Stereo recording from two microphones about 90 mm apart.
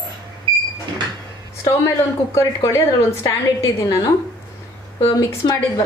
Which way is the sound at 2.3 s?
30° left (ahead or behind).